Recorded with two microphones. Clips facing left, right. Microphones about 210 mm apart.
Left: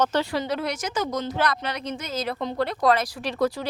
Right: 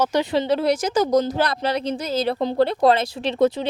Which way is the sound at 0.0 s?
15° right (ahead or behind).